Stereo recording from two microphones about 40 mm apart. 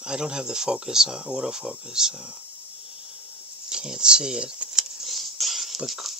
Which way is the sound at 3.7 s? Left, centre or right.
Centre.